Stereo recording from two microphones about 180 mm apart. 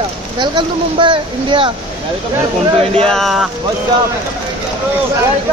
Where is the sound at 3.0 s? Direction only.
Centre (ahead or behind).